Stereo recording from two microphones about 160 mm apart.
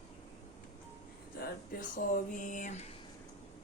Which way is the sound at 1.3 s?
70° left (ahead or behind).